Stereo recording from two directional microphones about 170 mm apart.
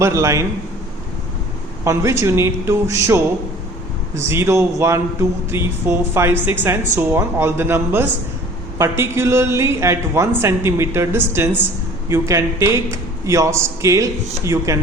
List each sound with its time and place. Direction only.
0.0 s speech: 15° right (ahead or behind)
1.8 s speech: 15° right (ahead or behind)